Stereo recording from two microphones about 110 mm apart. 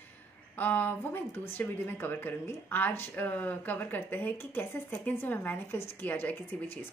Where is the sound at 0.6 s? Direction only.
15° left (ahead or behind).